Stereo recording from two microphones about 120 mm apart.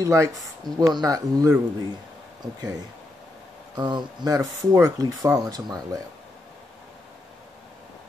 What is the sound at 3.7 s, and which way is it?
Speech, 40° right (ahead or behind).